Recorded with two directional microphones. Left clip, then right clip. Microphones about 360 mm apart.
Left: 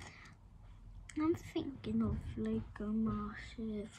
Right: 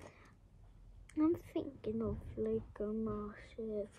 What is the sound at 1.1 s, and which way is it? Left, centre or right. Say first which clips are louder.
A woman's voice: right 1 dB; centre.